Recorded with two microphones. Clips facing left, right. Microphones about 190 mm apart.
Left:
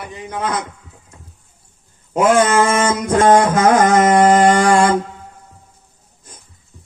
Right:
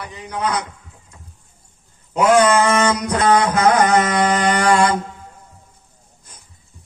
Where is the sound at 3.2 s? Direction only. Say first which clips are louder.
Left 3 dB; 45° left (ahead or behind).